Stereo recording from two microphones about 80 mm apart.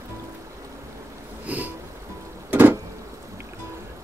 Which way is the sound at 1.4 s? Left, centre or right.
Centre.